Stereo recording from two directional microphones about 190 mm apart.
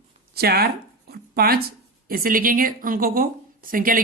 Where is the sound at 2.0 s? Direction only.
50° right (ahead or behind).